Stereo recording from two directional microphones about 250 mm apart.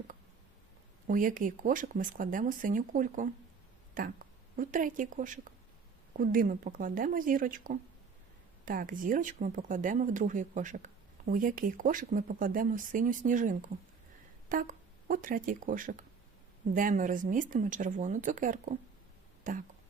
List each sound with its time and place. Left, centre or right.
1.0 s a woman's voice: right